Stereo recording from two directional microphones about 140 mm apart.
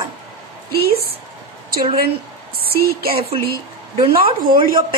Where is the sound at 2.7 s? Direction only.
90° right.